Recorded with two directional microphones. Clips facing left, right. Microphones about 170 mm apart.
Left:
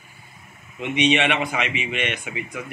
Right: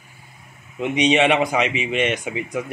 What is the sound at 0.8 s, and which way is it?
A man's voice, 35° right (ahead or behind).